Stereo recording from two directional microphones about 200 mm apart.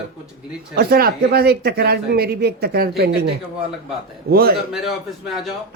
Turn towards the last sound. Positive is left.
turn(degrees=0)  # may be behind; listen again after turning